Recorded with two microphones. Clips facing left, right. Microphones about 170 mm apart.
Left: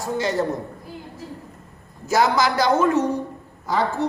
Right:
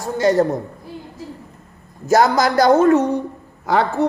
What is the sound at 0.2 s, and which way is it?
Speech, 45° right (ahead or behind).